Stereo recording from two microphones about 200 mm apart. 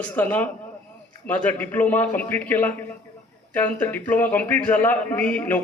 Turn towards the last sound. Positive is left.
turn(degrees=10)  # may be behind; listen again after turning